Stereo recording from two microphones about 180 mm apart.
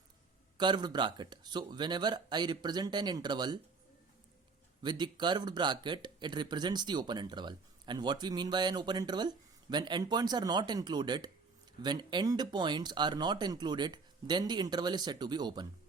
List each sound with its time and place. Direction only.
0.5 s speech: 25° right (ahead or behind)
4.8 s speech: 25° right (ahead or behind)